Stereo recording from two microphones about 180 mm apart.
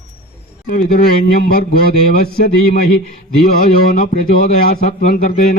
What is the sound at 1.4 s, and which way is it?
Speech, 60° left (ahead or behind).